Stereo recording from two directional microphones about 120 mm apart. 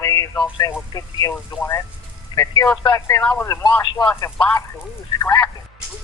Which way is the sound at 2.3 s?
45° left (ahead or behind).